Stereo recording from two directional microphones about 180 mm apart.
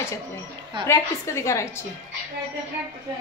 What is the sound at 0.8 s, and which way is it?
Speech, 15° left (ahead or behind).